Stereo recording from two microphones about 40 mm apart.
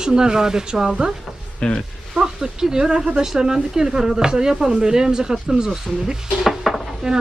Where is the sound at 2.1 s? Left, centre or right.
Centre.